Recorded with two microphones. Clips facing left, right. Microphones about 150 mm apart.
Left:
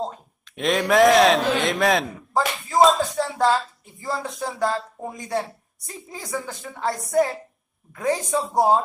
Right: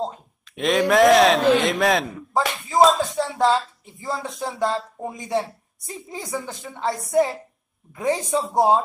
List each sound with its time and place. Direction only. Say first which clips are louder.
0.0 s a man's voice: right 1 dB; centre (ahead or behind)
7.9 s speech: right 1 dB; 25° right (ahead or behind)
8.2 s speech: right 1 dB; centre (ahead or behind)